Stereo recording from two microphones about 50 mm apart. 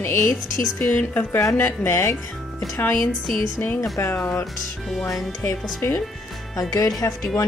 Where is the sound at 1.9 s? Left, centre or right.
Left.